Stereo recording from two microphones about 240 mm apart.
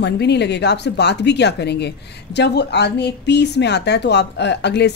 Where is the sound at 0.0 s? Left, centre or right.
Left.